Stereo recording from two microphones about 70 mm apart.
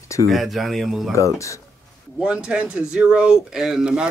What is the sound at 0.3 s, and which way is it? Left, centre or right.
Speech, centre.